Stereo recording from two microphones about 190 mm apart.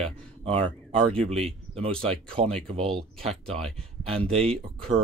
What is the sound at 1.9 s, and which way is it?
Speech, 5° left (ahead or behind).